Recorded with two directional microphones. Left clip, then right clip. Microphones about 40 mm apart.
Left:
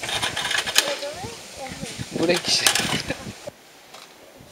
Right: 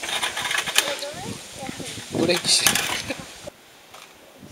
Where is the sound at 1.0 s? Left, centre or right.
Left; by 3.2 s centre.